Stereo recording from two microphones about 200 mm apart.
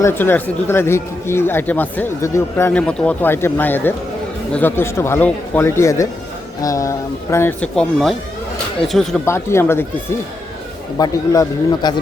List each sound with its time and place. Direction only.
0.0 s speech: 10° left (ahead or behind)
9.2 s a man's voice: 15° left (ahead or behind)